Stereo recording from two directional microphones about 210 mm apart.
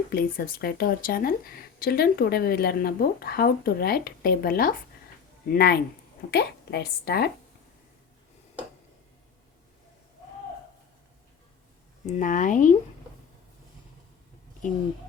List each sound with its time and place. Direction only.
0.1 s speech: 45° left (ahead or behind)
12.0 s speech: 35° left (ahead or behind)